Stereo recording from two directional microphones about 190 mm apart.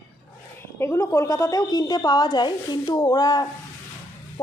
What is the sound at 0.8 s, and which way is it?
Speech, 15° left (ahead or behind).